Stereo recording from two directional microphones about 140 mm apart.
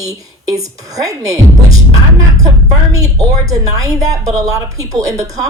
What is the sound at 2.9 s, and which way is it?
A woman's voice, 25° right (ahead or behind).